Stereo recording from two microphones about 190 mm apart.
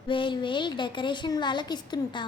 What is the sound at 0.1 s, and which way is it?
A woman's voice, 25° left (ahead or behind).